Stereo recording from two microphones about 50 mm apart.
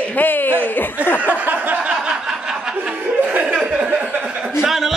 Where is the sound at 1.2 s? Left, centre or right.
Right.